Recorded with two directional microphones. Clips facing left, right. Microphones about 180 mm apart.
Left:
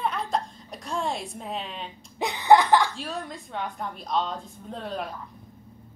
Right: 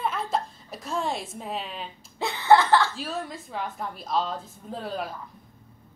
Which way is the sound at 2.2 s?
15° left (ahead or behind).